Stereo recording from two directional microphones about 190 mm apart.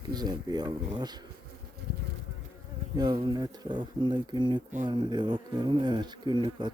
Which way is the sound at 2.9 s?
20° right (ahead or behind).